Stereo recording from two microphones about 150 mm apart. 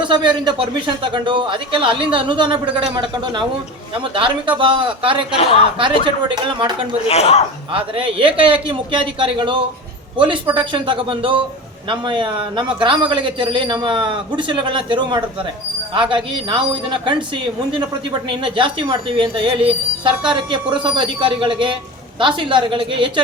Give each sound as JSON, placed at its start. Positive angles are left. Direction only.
{"t": 0.0, "sound": "speech", "side_deg": -30}
{"t": 7.1, "sound": "speech", "side_deg": 45}
{"t": 7.7, "sound": "speech", "side_deg": -35}